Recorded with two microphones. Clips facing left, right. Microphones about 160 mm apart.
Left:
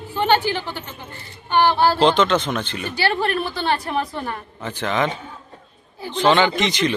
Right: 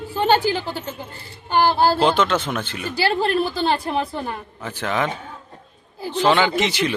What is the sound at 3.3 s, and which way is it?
A woman's voice, 30° right (ahead or behind).